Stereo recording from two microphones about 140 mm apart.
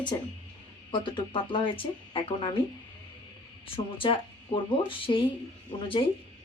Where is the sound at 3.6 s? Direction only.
40° left (ahead or behind).